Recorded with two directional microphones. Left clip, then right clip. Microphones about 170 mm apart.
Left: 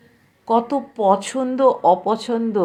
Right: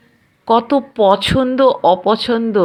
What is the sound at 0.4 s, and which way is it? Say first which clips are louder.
Speech: right 5 dB; 10° right (ahead or behind).